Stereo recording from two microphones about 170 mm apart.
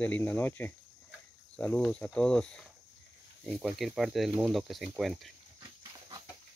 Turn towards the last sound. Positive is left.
turn(degrees=0)  # may be behind; listen again after turning